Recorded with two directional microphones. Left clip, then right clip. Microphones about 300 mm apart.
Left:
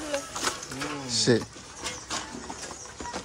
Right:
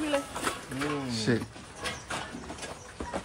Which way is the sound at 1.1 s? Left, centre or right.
Centre.